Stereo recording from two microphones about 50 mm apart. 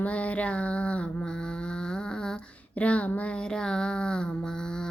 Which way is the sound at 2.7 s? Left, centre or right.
Left.